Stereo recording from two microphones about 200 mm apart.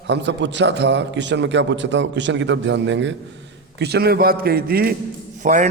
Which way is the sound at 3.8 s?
55° right (ahead or behind).